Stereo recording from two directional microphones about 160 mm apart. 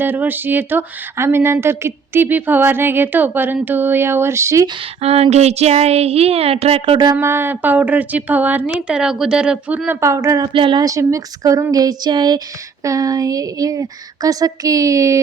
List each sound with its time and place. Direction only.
0.0 s speech: 10° right (ahead or behind)
4.9 s speech: 40° right (ahead or behind); by 10.4 s 20° right (ahead or behind)
10.4 s a woman's voice: 30° right (ahead or behind)